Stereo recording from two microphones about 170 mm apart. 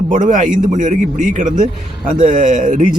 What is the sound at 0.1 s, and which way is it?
A man's voice, 50° right (ahead or behind).